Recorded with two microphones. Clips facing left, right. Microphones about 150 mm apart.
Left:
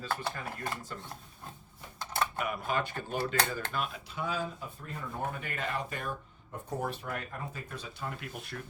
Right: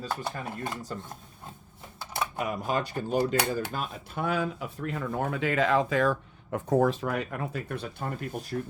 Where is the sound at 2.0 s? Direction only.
10° right (ahead or behind).